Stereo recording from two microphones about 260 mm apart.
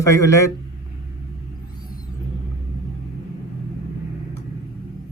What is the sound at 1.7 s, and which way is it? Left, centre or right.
Vehicle, centre.